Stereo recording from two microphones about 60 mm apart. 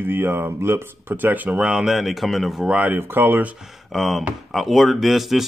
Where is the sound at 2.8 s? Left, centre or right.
Right.